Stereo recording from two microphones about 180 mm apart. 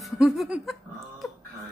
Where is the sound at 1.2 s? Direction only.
Centre (ahead or behind).